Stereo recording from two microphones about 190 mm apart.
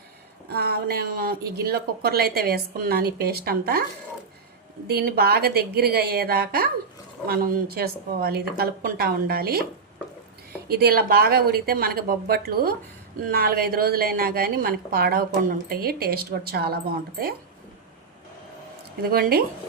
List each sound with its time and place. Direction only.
0.4 s a woman's voice: 55° right (ahead or behind)
4.9 s a woman's voice: 55° right (ahead or behind)
10.7 s a woman's voice: 55° right (ahead or behind)
19.1 s a woman's voice: 50° right (ahead or behind)